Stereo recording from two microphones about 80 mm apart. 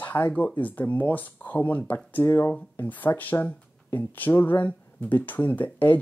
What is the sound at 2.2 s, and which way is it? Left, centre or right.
Speech, left.